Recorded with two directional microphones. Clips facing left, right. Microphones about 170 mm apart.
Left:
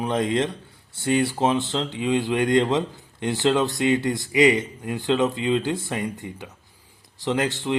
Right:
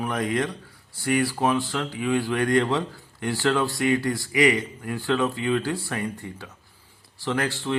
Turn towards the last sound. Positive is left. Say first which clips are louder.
# left 2 dB
turn(degrees=20)  # may be behind; listen again after turning